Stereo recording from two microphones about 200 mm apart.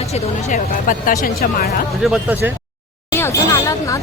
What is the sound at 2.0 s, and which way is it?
Speech, 5° right (ahead or behind).